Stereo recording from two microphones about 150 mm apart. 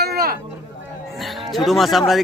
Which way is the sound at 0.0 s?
90° right.